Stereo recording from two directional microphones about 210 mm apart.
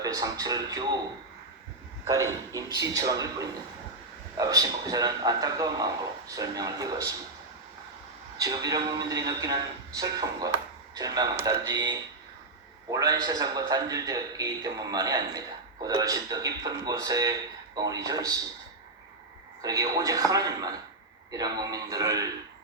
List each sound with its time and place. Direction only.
0.0 s a man's voice: 15° right (ahead or behind)
2.0 s a man's voice: 15° right (ahead or behind)
8.4 s a man's voice: 15° right (ahead or behind)
19.6 s a man's voice: 15° right (ahead or behind)